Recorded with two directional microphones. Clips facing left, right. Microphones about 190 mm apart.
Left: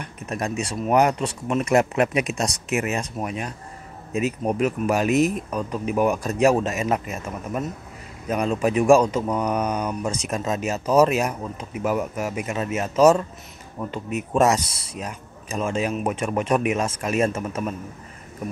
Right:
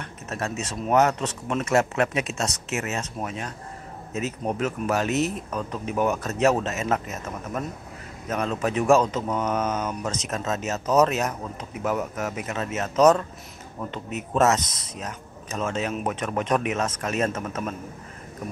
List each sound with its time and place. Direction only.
0.0 s speech: 15° left (ahead or behind)